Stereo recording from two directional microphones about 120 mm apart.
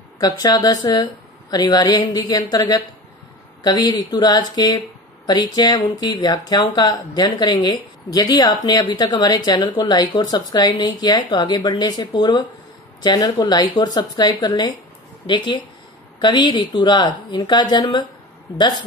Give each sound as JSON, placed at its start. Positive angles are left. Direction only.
{"t": 0.2, "sound": "speech", "side_deg": 30}